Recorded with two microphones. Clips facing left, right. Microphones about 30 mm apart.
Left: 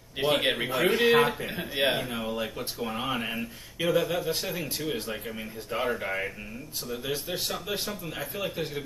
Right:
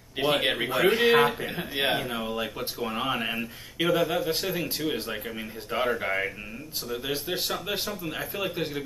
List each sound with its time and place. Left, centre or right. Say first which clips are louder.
0.4 s speech: right 1 dB; centre